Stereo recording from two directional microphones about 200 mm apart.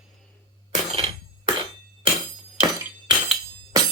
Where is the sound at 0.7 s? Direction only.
30° right (ahead or behind).